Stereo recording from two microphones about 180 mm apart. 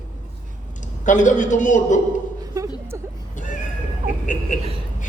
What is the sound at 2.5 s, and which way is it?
Speech, 20° right (ahead or behind).